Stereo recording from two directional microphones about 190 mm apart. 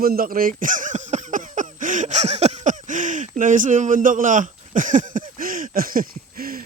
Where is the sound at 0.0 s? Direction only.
50° right (ahead or behind).